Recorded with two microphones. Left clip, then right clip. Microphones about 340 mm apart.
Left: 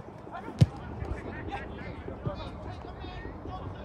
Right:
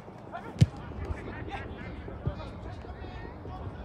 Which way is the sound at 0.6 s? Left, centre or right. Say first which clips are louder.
Left 1 dB; centre.